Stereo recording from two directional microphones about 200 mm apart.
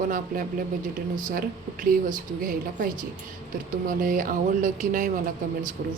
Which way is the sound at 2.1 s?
40° right (ahead or behind).